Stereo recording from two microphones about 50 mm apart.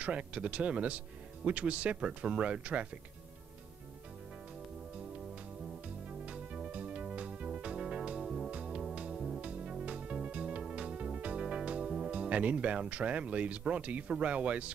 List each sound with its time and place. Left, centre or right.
0.0 s speech: right
6.0 s music: right
8.2 s music: centre
9.4 s music: right
12.1 s speech: right